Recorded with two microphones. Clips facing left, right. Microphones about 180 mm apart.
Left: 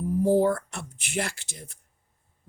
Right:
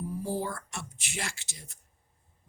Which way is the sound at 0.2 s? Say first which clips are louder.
Left 15 dB; 55° left (ahead or behind).